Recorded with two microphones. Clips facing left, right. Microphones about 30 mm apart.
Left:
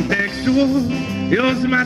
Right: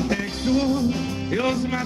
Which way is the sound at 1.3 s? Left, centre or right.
Left.